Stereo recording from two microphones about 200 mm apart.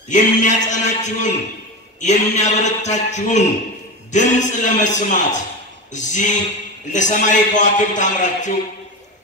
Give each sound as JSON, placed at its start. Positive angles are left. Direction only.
{"t": 0.1, "sound": "a man's voice", "side_deg": 40}